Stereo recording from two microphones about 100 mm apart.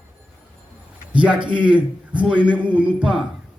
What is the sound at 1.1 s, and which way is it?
A man's voice, 10° right (ahead or behind).